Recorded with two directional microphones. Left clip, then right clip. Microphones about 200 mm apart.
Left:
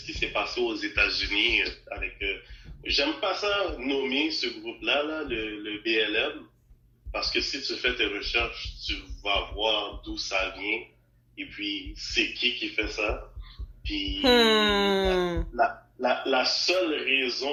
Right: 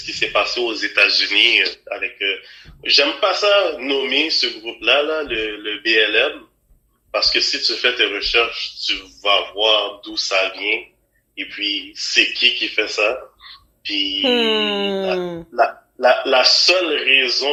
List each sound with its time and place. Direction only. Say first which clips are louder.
0.0 s a man's voice: right 11 dB; 60° right (ahead or behind)
14.2 s speech: right 2 dB; 10° right (ahead or behind)
15.5 s speech: right 9 dB; 60° right (ahead or behind)